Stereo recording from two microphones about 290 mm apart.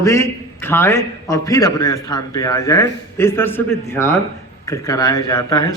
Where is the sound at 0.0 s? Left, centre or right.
Centre.